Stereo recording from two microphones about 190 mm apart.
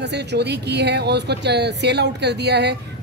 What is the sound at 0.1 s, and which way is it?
Speech, 60° right (ahead or behind).